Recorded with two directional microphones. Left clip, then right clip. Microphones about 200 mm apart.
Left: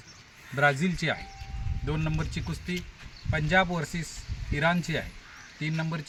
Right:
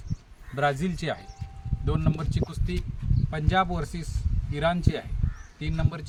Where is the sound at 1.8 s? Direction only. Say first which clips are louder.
Right 2 dB; 5° left (ahead or behind).